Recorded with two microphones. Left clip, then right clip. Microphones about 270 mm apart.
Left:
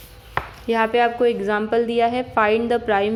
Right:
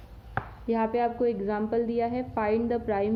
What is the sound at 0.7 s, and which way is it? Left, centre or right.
A woman's voice, centre.